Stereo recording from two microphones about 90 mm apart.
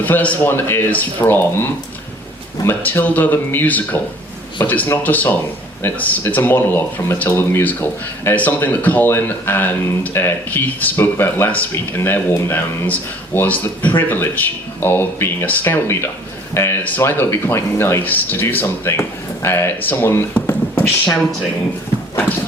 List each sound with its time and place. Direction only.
0.0 s speech: 15° left (ahead or behind)
20.3 s a sound: 25° left (ahead or behind)
22.1 s clip-clop: 25° left (ahead or behind)